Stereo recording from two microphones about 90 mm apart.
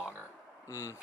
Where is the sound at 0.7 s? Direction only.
35° left (ahead or behind).